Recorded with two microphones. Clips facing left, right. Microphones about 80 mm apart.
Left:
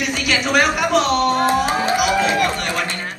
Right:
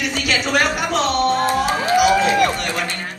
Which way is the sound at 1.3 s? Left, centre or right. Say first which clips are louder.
Left 1 dB; left.